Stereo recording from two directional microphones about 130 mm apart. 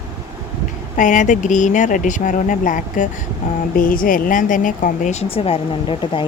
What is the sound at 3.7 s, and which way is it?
Speech, 90° left.